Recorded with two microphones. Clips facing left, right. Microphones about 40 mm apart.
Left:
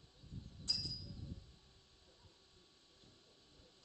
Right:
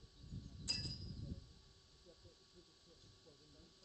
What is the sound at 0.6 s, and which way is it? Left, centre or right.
Chink, right.